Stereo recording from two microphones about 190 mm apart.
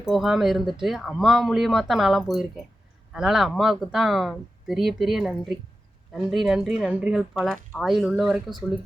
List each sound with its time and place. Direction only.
0.0 s speech: centre (ahead or behind)